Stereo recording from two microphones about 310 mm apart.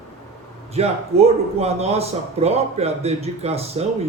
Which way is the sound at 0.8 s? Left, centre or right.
Centre.